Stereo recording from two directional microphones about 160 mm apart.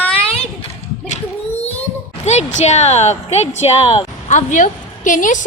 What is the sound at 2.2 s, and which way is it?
A woman's voice, 45° left (ahead or behind).